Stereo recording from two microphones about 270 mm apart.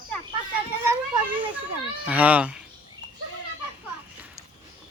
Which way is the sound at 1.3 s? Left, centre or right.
Centre.